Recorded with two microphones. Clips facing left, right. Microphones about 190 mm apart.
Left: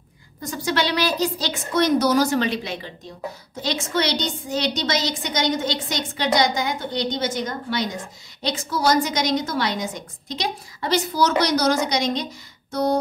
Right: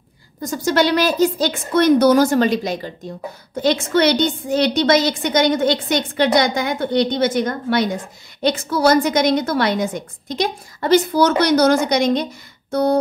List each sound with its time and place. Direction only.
0.4 s a woman's voice: 45° right (ahead or behind)
3.5 s a woman's voice: 55° right (ahead or behind)